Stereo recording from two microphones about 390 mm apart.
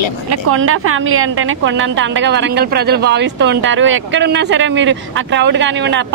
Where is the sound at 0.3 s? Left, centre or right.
Right.